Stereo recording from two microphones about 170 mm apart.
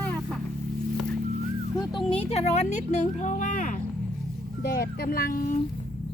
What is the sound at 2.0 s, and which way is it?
Speech, 35° left (ahead or behind).